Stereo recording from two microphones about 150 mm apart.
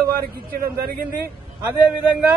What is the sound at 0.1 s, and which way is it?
Speech, 75° right (ahead or behind).